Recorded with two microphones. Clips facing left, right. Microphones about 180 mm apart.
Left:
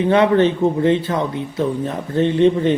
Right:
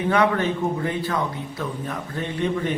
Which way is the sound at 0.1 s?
25° left (ahead or behind).